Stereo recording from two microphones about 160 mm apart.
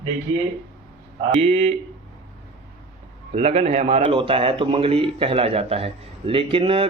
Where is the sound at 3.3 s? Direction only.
40° right (ahead or behind).